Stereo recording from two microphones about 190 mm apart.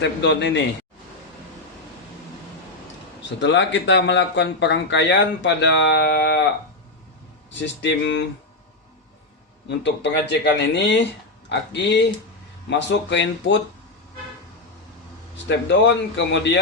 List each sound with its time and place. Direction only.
0.0 s speech: 65° left (ahead or behind)
3.4 s speech: 70° left (ahead or behind)
7.6 s speech: 70° left (ahead or behind)
9.6 s speech: 65° left (ahead or behind)
15.4 s speech: 70° left (ahead or behind)